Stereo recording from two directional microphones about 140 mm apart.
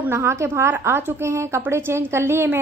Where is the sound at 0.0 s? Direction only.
15° right (ahead or behind).